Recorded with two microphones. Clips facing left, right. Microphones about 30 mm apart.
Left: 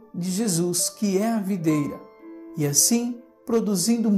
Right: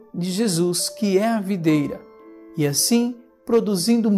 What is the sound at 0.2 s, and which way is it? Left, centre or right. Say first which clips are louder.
Speech: right 4 dB; right.